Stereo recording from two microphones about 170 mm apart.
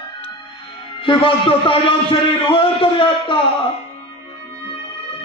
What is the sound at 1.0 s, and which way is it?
A man's voice, 30° left (ahead or behind).